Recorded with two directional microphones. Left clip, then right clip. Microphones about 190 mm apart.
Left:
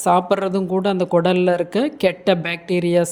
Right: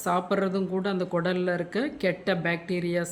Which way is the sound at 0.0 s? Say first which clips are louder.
Left 9 dB; 25° left (ahead or behind).